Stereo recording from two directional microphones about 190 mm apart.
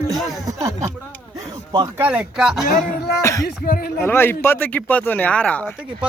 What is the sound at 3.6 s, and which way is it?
Speech, 50° left (ahead or behind).